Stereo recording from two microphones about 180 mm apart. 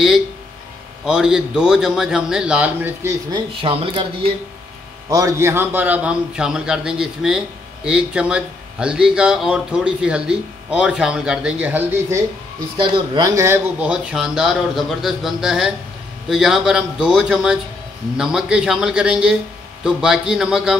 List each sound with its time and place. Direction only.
1.0 s a man's voice: 5° right (ahead or behind)
3.6 s speech: 30° right (ahead or behind)
5.1 s a man's voice: 15° right (ahead or behind)
12.7 s speech: 25° right (ahead or behind)
13.3 s a man's voice: 15° right (ahead or behind)